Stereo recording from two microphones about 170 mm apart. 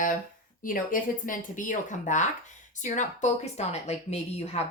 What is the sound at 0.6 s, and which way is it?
A woman's voice, 55° left (ahead or behind).